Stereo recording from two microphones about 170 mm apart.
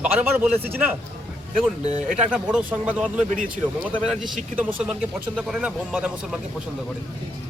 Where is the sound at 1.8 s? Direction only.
40° right (ahead or behind).